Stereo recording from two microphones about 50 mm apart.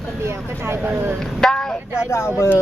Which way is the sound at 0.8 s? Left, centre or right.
Right.